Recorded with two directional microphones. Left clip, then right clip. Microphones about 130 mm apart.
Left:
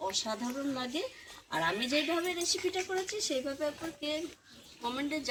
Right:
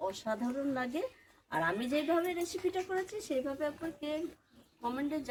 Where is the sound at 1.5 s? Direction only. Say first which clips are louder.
Left 2 dB; 10° right (ahead or behind).